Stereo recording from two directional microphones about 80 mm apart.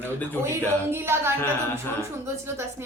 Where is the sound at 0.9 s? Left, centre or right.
Right.